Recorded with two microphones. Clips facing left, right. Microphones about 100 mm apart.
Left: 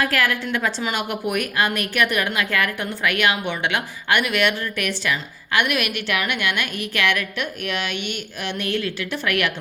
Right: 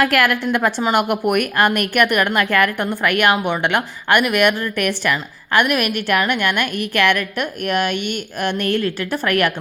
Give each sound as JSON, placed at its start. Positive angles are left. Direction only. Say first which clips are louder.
{"t": 0.0, "sound": "a woman's voice", "louder": "right 5 dB", "side_deg": -65}